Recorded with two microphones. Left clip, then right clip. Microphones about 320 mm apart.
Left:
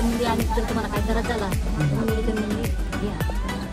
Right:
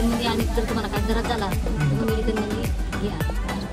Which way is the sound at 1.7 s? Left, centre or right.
Centre.